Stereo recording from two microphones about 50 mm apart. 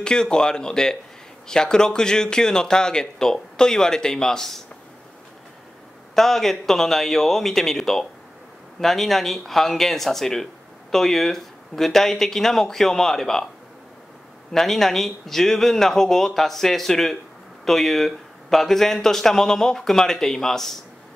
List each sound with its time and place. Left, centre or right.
0.0 s speech: centre
6.1 s speech: centre
14.5 s speech: centre